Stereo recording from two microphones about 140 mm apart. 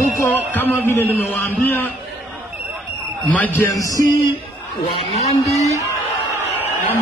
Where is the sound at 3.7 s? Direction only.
25° left (ahead or behind).